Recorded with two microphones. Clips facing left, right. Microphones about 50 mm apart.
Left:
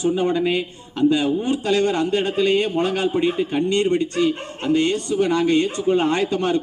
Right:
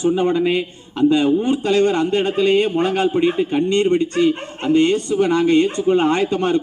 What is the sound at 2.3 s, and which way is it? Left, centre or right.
Speech, centre.